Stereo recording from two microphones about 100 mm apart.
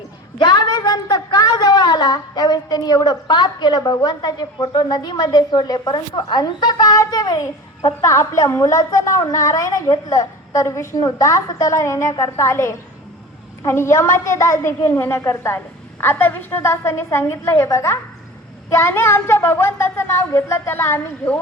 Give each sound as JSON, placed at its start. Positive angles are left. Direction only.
{"t": 0.3, "sound": "a woman's voice", "side_deg": 50}
{"t": 8.0, "sound": "a woman's voice", "side_deg": 30}